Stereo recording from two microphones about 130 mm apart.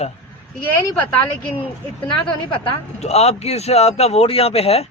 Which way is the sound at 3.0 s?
55° left (ahead or behind).